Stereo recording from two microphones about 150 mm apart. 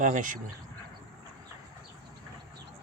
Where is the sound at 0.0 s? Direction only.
60° right (ahead or behind).